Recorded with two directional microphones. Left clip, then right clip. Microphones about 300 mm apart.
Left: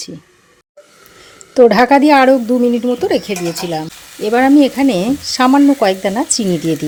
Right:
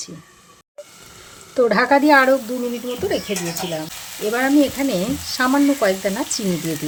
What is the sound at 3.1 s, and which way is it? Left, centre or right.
Speech, left.